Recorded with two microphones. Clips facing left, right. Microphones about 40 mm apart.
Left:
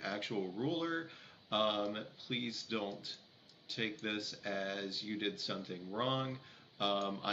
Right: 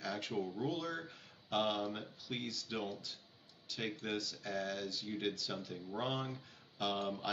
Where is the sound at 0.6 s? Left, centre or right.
Left.